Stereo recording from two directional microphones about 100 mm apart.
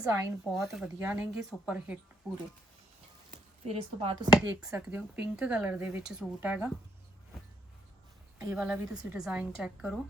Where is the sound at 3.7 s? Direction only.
70° right (ahead or behind).